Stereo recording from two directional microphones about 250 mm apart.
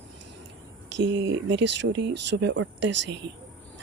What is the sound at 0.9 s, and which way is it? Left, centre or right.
Speech, right.